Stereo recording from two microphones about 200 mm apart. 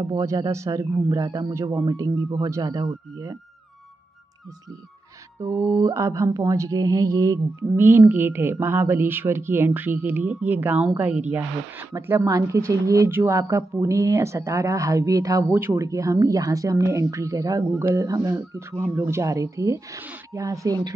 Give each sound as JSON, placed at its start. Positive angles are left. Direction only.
{"t": 0.0, "sound": "speech", "side_deg": -20}
{"t": 5.4, "sound": "speech", "side_deg": -15}